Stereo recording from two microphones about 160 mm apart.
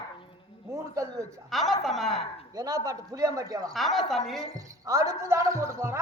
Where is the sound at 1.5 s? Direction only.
Centre (ahead or behind).